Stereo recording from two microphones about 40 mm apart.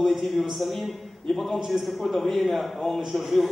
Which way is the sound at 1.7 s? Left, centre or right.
Centre.